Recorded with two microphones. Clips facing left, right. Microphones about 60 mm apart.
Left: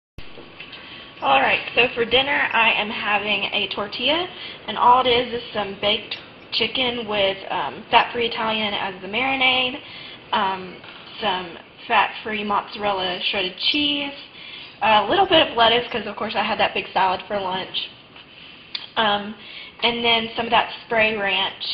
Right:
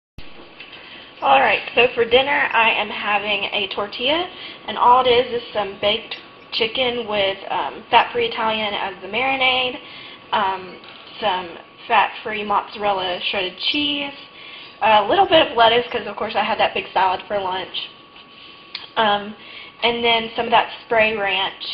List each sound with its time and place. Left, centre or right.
1.2 s a woman's voice: centre
14.8 s a woman's voice: centre
18.9 s a woman's voice: centre